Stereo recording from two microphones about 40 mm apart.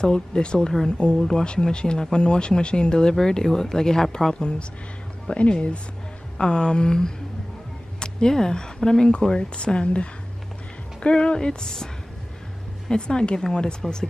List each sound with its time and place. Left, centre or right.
0.0 s speech: left